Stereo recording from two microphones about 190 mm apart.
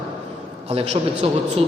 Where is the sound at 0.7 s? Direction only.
35° right (ahead or behind).